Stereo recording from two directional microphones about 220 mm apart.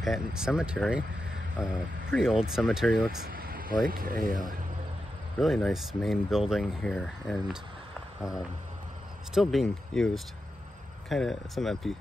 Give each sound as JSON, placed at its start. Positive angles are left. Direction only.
{"t": 0.0, "sound": "speech", "side_deg": 0}
{"t": 3.3, "sound": "vehicle", "side_deg": -40}
{"t": 3.8, "sound": "speech", "side_deg": -40}
{"t": 5.4, "sound": "speech", "side_deg": 0}